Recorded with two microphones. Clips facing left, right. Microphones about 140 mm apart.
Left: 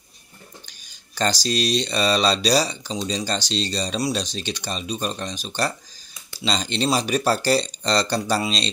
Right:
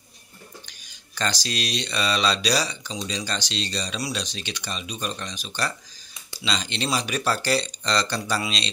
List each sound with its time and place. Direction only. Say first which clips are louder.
1.1 s speech: left 5 dB; 35° left (ahead or behind)